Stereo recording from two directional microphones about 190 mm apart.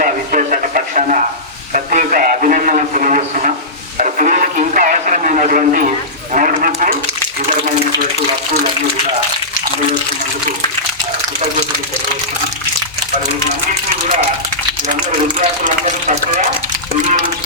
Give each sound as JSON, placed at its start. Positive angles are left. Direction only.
{"t": 0.0, "sound": "radio", "side_deg": -45}
{"t": 1.7, "sound": "a man's voice", "side_deg": -40}
{"t": 3.9, "sound": "a sound", "side_deg": -40}
{"t": 15.6, "sound": "a man's voice", "side_deg": -40}